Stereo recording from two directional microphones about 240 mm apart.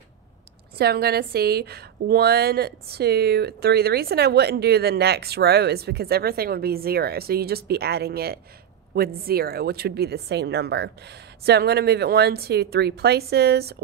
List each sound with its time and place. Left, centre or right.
0.7 s a woman's voice: right